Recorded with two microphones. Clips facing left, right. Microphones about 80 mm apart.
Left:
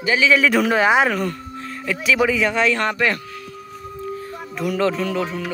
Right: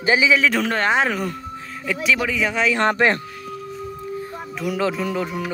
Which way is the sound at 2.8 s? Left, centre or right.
Right.